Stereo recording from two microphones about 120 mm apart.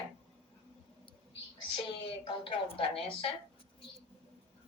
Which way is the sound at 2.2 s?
45° left (ahead or behind).